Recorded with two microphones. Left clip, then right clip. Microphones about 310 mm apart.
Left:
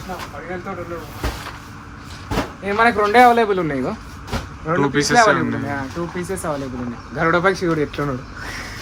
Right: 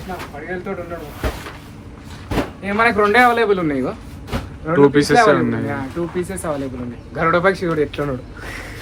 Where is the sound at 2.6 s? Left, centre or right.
Left.